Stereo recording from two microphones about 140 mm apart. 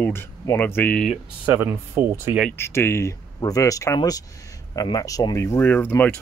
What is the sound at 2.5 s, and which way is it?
Speech, 15° left (ahead or behind).